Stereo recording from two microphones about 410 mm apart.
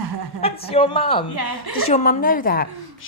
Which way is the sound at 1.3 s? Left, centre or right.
Right.